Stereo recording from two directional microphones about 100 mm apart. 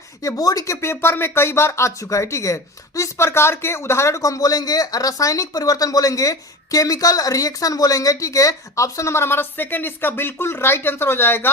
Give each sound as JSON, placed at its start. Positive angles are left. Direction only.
{"t": 0.2, "sound": "speech", "side_deg": 35}